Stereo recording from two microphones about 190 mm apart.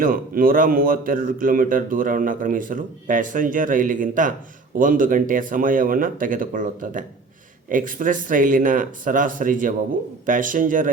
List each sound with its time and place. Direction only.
0.0 s speech: 50° right (ahead or behind)